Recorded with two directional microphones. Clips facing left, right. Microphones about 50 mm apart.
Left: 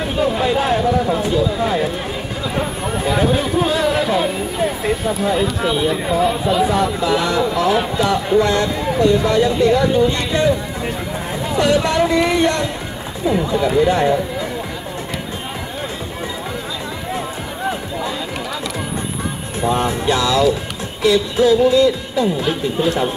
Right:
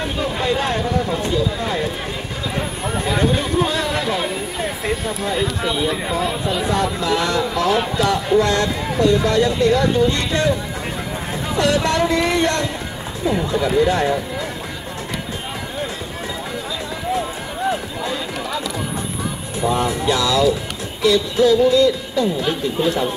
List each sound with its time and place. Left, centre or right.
0.0 s speech: centre
11.5 s speech: centre
13.8 s music: centre
19.7 s speech: left
21.0 s music: centre